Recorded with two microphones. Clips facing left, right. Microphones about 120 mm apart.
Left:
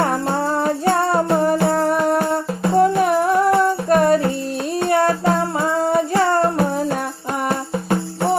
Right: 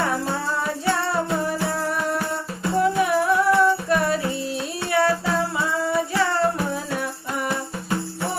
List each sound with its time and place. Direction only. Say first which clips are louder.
0.0 s music: left 5 dB; 50° left (ahead or behind)